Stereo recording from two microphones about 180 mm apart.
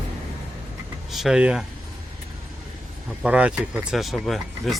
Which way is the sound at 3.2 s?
5° right (ahead or behind).